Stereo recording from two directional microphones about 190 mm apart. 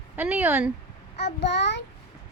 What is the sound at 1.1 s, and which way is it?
Speech, 65° left (ahead or behind).